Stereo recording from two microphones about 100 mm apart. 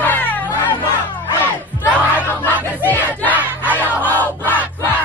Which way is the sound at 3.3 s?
15° right (ahead or behind).